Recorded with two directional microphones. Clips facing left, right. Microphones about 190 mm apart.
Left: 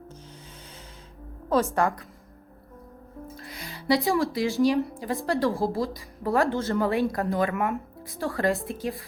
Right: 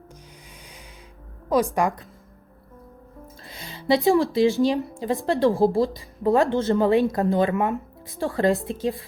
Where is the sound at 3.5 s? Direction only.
20° right (ahead or behind).